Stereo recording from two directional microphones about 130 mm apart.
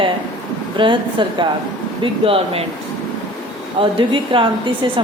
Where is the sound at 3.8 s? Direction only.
40° right (ahead or behind).